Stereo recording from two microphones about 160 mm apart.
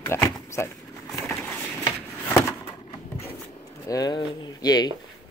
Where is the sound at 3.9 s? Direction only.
25° left (ahead or behind).